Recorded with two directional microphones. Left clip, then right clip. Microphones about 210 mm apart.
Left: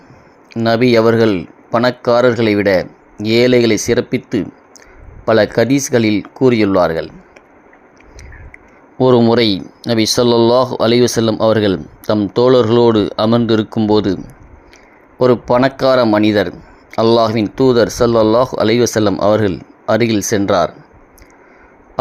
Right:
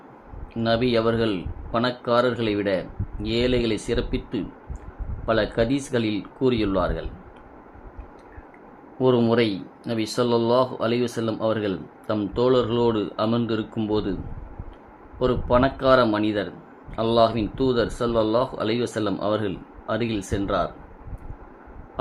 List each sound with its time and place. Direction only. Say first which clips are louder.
0.6 s speech: left 10 dB; 35° left (ahead or behind)
9.0 s speech: left 9 dB; 40° left (ahead or behind)
15.2 s speech: left 9 dB; 35° left (ahead or behind)